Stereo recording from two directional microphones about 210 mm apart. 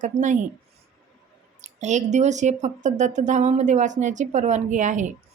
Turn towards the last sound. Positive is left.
turn(degrees=-35)  # may be behind; listen again after turning